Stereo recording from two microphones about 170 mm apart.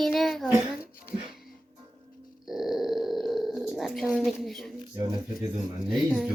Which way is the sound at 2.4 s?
Centre (ahead or behind).